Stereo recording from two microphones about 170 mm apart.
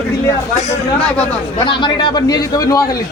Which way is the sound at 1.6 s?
30° left (ahead or behind).